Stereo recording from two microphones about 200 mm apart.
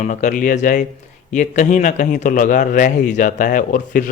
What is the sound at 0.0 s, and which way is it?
A man's voice, 40° left (ahead or behind).